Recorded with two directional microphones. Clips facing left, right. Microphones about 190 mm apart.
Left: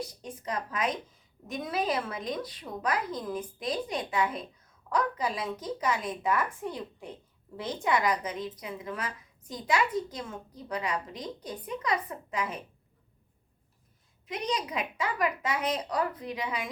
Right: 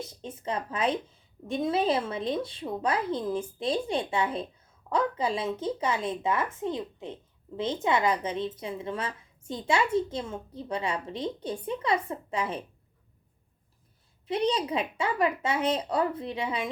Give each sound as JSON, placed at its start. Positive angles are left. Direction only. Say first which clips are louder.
{"t": 0.0, "sound": "a woman's voice", "louder": "right 1 dB", "side_deg": -25}
{"t": 14.3, "sound": "a woman's voice", "louder": "right 6 dB", "side_deg": -30}